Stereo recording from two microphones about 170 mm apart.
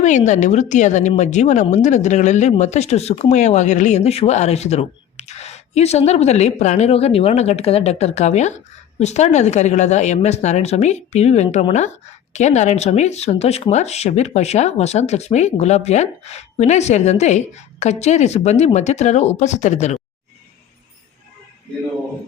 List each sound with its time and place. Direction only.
0.0 s a woman's voice: 45° left (ahead or behind)